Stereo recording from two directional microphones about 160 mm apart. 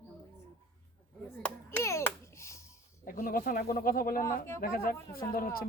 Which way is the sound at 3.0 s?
60° left (ahead or behind).